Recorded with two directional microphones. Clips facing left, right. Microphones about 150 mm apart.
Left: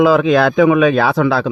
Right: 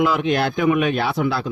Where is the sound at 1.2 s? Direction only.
90° left.